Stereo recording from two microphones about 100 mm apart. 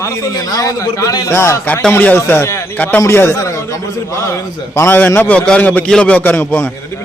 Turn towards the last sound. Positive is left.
turn(degrees=20)  # may be behind; listen again after turning